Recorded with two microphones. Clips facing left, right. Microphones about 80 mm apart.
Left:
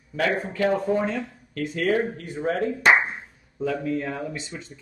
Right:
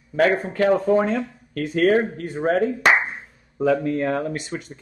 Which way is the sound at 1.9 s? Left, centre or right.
Right.